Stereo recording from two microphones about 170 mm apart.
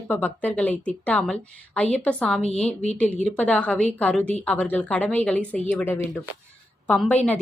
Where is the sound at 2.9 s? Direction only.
5° left (ahead or behind).